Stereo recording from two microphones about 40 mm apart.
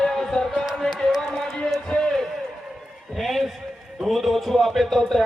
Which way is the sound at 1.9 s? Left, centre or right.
Centre.